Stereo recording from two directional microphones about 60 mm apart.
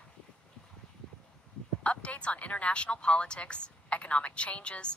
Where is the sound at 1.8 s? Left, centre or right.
Centre.